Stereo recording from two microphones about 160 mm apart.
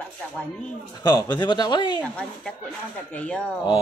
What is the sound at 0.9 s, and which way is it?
Speech, 25° left (ahead or behind).